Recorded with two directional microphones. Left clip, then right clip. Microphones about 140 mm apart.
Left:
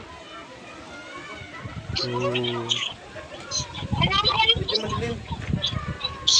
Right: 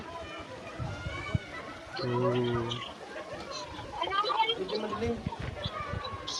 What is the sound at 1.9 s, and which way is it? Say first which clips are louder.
Speech: left 4 dB; 40° left (ahead or behind).